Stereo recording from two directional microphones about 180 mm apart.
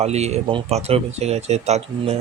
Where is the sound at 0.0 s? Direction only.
35° right (ahead or behind).